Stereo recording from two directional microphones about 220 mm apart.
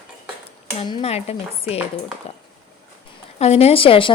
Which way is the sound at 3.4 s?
25° left (ahead or behind).